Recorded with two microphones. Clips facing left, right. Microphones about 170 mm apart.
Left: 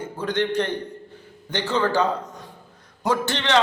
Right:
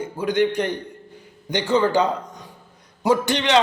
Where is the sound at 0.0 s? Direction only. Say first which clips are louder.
Right 4 dB; 10° right (ahead or behind).